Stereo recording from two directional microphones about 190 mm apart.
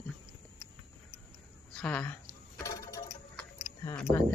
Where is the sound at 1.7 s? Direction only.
5° left (ahead or behind).